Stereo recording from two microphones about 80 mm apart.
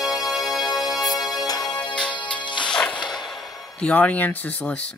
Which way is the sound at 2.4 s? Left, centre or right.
Left.